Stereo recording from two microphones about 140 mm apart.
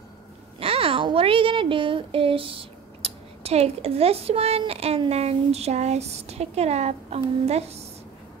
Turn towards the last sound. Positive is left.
turn(degrees=-50)  # may be behind; listen again after turning